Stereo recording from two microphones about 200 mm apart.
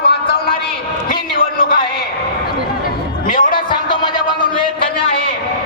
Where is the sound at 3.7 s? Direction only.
20° left (ahead or behind).